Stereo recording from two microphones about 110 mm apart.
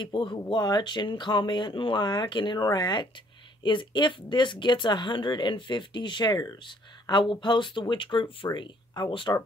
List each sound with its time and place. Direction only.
0.0 s speech: 45° left (ahead or behind)
9.3 s speech: 30° left (ahead or behind)